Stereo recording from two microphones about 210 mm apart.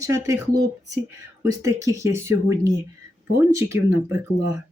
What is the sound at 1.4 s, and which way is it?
Speech, 15° right (ahead or behind).